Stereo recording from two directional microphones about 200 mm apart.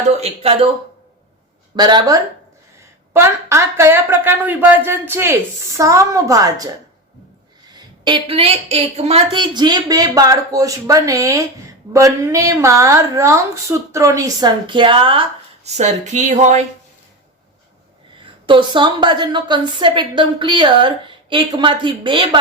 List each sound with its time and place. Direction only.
0.1 s a woman's voice: 30° right (ahead or behind)
1.7 s a woman's voice: 20° right (ahead or behind)
7.7 s a woman's voice: 20° right (ahead or behind)
18.4 s a woman's voice: 25° right (ahead or behind)